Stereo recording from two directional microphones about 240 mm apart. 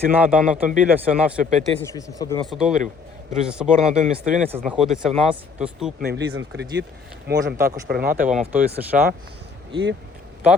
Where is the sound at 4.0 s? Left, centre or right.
Right.